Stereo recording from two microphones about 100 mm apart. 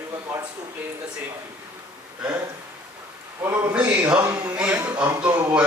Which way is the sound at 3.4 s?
25° right (ahead or behind).